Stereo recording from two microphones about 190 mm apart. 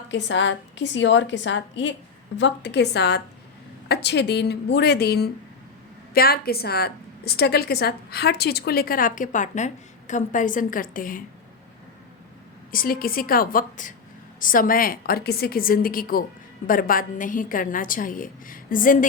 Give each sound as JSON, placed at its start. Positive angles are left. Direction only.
{"t": 0.1, "sound": "a woman's voice", "side_deg": 75}
{"t": 12.7, "sound": "a woman's voice", "side_deg": 50}